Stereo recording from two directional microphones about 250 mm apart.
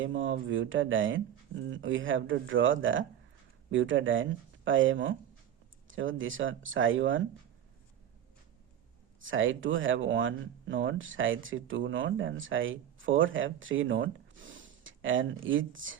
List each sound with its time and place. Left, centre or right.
0.0 s speech: right
9.2 s speech: right